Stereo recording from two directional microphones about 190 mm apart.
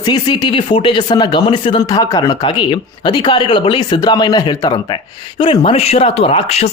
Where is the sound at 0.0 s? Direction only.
20° left (ahead or behind).